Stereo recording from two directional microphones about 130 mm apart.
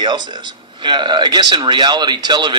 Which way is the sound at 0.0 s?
35° right (ahead or behind).